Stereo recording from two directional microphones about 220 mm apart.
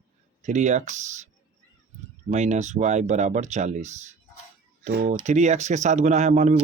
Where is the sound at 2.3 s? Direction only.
30° right (ahead or behind).